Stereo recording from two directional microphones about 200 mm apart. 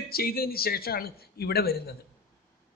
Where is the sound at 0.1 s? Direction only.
50° left (ahead or behind).